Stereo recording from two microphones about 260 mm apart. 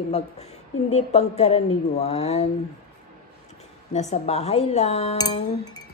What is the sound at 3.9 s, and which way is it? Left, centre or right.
Speech, left.